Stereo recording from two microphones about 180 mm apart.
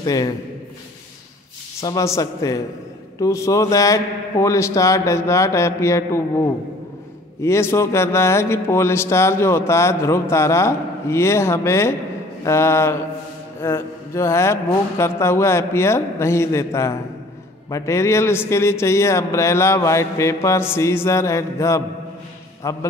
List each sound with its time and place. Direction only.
0.0 s a man's voice: 20° left (ahead or behind)
1.8 s speech: 20° left (ahead or behind)